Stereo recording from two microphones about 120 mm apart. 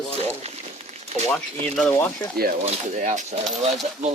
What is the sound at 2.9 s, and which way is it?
Speech, 80° right.